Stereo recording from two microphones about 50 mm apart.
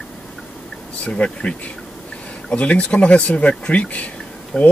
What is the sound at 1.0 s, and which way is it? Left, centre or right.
Speech, left.